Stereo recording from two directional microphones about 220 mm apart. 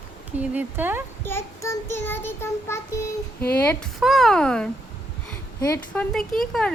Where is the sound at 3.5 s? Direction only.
10° left (ahead or behind).